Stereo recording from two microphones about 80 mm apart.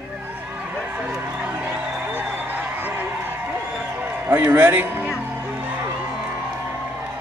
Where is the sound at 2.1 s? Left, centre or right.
Right.